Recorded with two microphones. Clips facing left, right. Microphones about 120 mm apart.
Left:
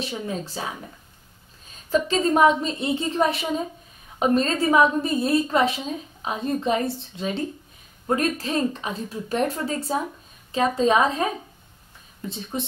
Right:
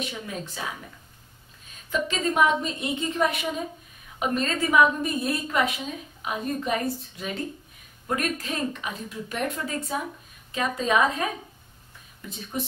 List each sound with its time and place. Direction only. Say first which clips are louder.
0.0 s speech: left 4 dB; 30° left (ahead or behind)
1.9 s a woman's voice: left 6 dB; 35° left (ahead or behind)
12.3 s a woman's voice: left 2 dB; 25° left (ahead or behind)